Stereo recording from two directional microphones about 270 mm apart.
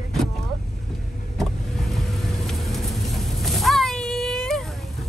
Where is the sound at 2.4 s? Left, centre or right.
Centre.